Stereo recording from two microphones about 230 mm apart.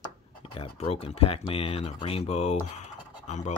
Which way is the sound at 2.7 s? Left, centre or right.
Left.